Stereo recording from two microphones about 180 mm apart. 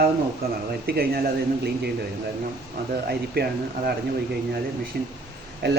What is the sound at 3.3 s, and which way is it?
Speech, 60° right (ahead or behind).